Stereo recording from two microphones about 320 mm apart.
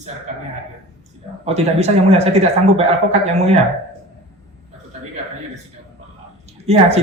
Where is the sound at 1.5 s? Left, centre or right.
Centre.